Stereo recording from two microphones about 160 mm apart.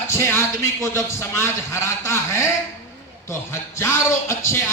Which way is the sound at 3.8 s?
20° left (ahead or behind).